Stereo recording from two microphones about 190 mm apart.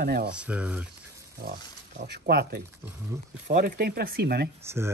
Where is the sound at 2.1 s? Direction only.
55° right (ahead or behind).